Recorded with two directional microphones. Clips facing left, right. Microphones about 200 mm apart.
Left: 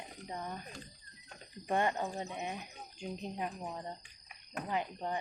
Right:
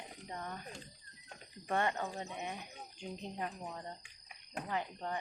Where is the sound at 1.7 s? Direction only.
15° left (ahead or behind).